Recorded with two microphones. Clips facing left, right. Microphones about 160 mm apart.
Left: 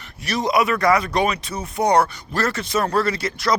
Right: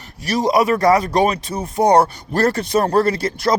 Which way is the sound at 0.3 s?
35° right (ahead or behind).